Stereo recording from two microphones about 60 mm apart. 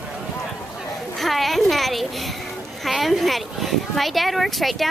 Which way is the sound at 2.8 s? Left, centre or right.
Centre.